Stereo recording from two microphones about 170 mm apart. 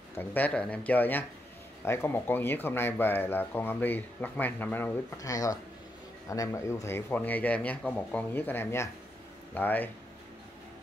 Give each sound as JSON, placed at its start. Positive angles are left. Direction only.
{"t": 0.1, "sound": "speech", "side_deg": 10}